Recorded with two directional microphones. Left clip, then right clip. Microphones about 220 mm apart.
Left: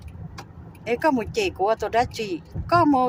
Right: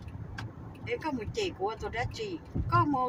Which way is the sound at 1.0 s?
35° left (ahead or behind).